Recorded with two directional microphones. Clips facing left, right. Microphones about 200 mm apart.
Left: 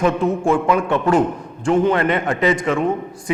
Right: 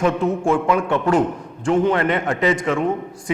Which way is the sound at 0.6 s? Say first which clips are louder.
Left 1 dB; 15° left (ahead or behind).